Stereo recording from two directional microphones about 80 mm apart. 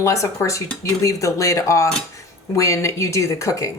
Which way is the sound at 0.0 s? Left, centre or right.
Left.